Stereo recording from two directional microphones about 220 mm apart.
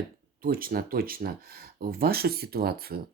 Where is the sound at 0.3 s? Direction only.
40° right (ahead or behind).